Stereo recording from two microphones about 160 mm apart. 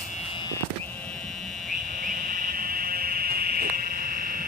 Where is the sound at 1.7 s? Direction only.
60° right (ahead or behind).